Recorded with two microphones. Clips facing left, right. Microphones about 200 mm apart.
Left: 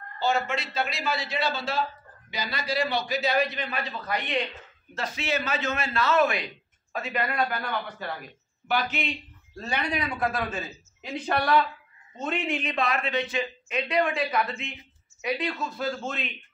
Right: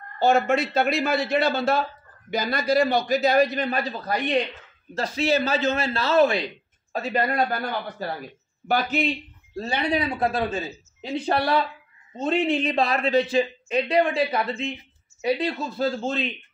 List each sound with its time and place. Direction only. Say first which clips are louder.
0.2 s a man's voice: right 7 dB; 50° right (ahead or behind)
9.6 s a man's voice: right 5 dB; 30° right (ahead or behind)